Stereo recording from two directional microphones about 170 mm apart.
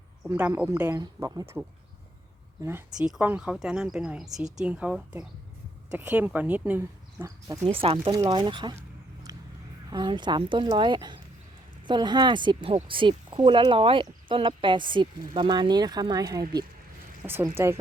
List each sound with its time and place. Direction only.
0.3 s speech: 10° right (ahead or behind)
2.6 s speech: 15° right (ahead or behind)
7.7 s speech: 35° right (ahead or behind)
9.9 s speech: 25° right (ahead or behind)
17.2 s speech: 15° right (ahead or behind)